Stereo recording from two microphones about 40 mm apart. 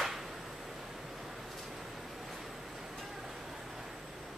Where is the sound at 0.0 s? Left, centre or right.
Centre.